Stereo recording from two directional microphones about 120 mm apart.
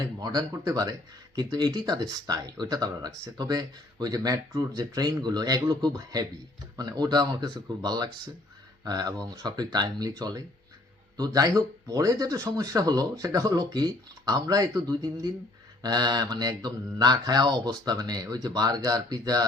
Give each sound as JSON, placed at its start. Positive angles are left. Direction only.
{"t": 0.0, "sound": "speech", "side_deg": -35}